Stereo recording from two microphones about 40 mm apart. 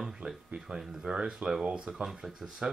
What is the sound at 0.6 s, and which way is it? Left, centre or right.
Speech, centre.